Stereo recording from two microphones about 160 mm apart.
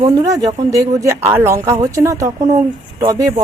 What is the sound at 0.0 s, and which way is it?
Speech, 25° right (ahead or behind).